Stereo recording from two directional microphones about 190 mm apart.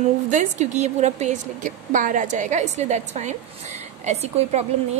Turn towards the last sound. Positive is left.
turn(degrees=-35)  # may be behind; listen again after turning